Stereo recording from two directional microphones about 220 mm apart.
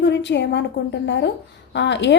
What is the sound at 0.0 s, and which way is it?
A woman's voice, 55° left (ahead or behind).